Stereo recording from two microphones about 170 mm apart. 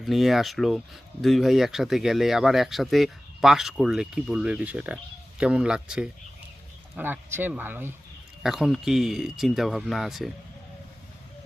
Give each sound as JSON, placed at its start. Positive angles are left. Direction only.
{"t": 0.0, "sound": "speech", "side_deg": 0}
{"t": 8.4, "sound": "speech", "side_deg": 0}